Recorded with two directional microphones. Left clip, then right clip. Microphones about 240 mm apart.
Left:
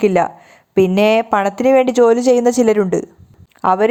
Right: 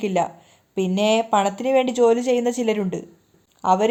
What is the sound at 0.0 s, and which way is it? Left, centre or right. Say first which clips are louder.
Speech: left 8 dB; left.